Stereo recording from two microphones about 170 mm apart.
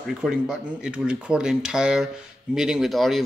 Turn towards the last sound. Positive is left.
turn(degrees=0)  # may be behind; listen again after turning